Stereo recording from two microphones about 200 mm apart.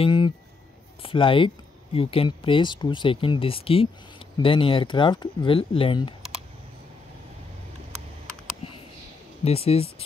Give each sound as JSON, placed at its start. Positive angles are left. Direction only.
{"t": 0.0, "sound": "speech", "side_deg": 25}
{"t": 9.4, "sound": "speech", "side_deg": 30}